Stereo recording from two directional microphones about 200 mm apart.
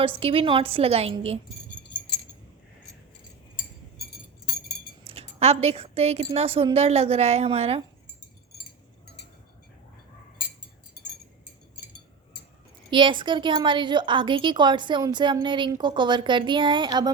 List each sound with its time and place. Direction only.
0.0 s a woman's voice: 30° right (ahead or behind)
5.0 s a woman's voice: 30° right (ahead or behind)
12.9 s a woman's voice: 25° right (ahead or behind)